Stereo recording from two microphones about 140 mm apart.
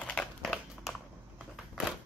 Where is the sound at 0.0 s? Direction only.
5° left (ahead or behind).